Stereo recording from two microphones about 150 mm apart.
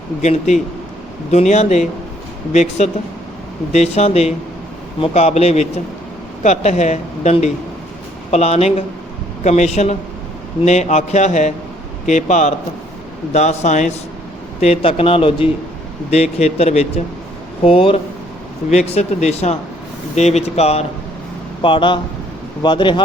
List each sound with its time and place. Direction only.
0.2 s speech: 50° left (ahead or behind)
14.6 s speech: 40° left (ahead or behind)
21.6 s speech: 35° left (ahead or behind)